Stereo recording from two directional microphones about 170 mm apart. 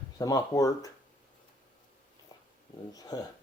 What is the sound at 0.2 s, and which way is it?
Speech, 20° left (ahead or behind).